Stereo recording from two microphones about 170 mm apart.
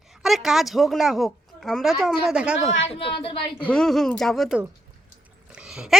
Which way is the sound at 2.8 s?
35° left (ahead or behind).